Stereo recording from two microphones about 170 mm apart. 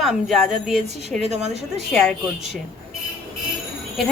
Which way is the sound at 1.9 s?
Centre (ahead or behind).